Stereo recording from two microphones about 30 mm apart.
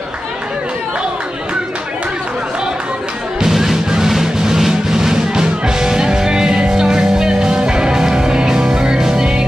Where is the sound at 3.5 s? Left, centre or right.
Centre.